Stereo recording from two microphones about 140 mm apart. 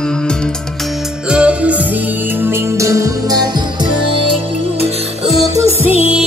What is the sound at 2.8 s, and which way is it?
Music, 20° right (ahead or behind).